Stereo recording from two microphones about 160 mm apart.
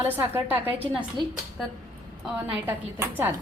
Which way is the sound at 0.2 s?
10° right (ahead or behind).